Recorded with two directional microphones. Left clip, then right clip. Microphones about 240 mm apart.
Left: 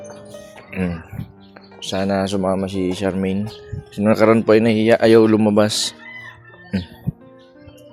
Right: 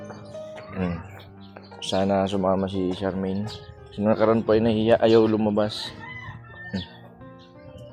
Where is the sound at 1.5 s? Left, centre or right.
Centre; by 5.7 s left.